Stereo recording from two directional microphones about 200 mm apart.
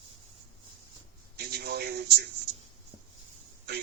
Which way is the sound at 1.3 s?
50° right (ahead or behind).